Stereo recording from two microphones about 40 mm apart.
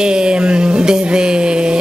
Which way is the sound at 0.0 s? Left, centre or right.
Right.